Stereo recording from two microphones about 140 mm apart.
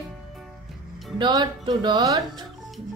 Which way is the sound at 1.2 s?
35° right (ahead or behind).